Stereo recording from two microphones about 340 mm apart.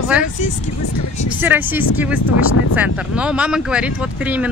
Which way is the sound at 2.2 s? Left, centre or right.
Left.